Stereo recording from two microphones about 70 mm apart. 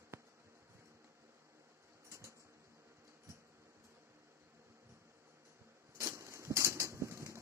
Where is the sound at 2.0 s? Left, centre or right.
Right.